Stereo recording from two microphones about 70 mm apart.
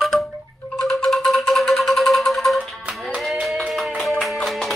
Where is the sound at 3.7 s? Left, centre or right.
Centre.